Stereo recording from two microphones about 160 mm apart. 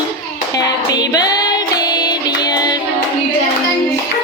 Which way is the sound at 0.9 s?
25° left (ahead or behind).